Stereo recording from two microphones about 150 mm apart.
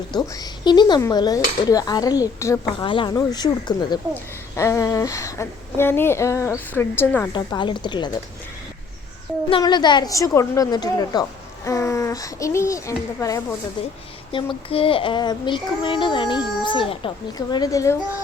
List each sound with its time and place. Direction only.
0.1 s a woman's voice: 30° left (ahead or behind)
2.8 s a child's voice: 35° left (ahead or behind); by 7.3 s 10° left (ahead or behind)
7.3 s a child's voice: 30° left (ahead or behind)
9.5 s a woman's voice: 30° left (ahead or behind)
14.3 s a child's voice: 40° left (ahead or behind); by 18.2 s 20° left (ahead or behind)